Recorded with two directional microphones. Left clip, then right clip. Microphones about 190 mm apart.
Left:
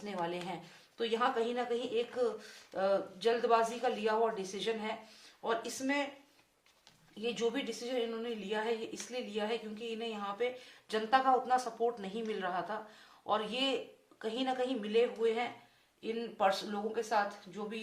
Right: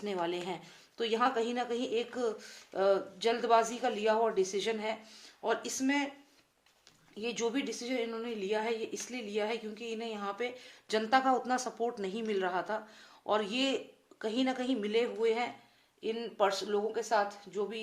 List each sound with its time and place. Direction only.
0.0 s a woman's voice: 45° right (ahead or behind)
7.2 s a woman's voice: 40° right (ahead or behind)